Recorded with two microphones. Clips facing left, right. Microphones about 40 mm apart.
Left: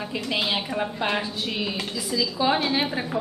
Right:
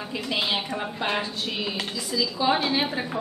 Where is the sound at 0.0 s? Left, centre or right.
Centre.